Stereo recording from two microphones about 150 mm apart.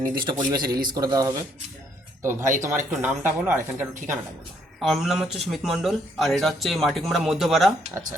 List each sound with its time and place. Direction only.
0.3 s a man's voice: 30° right (ahead or behind)
4.8 s speech: centre (ahead or behind)